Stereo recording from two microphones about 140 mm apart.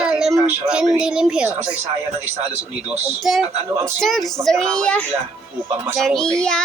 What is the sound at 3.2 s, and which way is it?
Speech, centre (ahead or behind).